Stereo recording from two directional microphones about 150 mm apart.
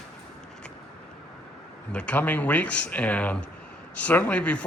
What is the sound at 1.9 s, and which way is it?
A man's voice, 10° left (ahead or behind).